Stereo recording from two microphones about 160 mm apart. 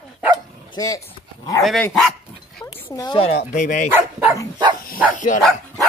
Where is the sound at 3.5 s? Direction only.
55° left (ahead or behind).